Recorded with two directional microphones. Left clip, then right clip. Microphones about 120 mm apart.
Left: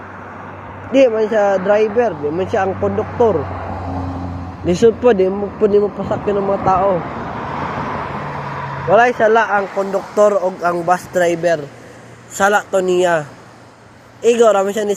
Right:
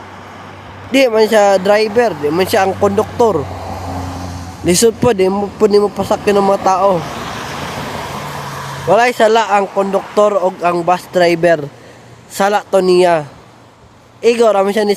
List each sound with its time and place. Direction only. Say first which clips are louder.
0.9 s speech: right 2 dB; 75° right (ahead or behind)
4.6 s speech: even; 75° right (ahead or behind); by 6.8 s 90° right
7.5 s vehicle: left 1 dB; 30° right (ahead or behind)
8.9 s a man's voice: right 1 dB; 90° right; by 11.2 s 50° right (ahead or behind)
12.4 s speech: right 2 dB; 55° right (ahead or behind)